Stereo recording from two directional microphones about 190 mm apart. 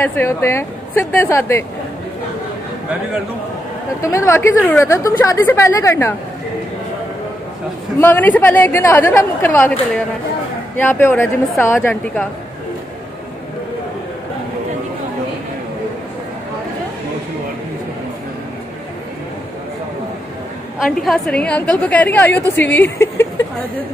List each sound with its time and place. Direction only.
0.0 s a woman's voice: 10° left (ahead or behind)
4.0 s a woman's voice: 15° left (ahead or behind)
8.0 s a woman's voice: 10° left (ahead or behind)
20.8 s a woman's voice: centre (ahead or behind)